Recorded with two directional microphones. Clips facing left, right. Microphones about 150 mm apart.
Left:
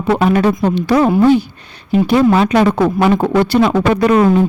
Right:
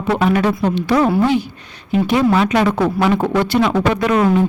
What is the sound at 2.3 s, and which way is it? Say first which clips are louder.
Speech: left 3 dB; 35° left (ahead or behind).